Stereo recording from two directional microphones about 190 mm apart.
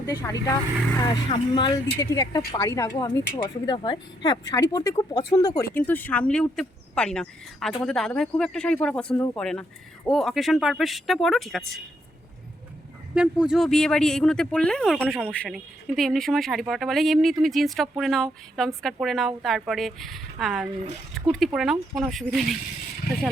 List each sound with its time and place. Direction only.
0.0 s speech: 15° left (ahead or behind)
5.7 s speech: 10° left (ahead or behind)
13.1 s speech: 5° right (ahead or behind)